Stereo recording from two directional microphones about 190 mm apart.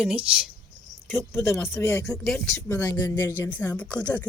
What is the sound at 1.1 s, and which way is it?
Speech, 15° left (ahead or behind).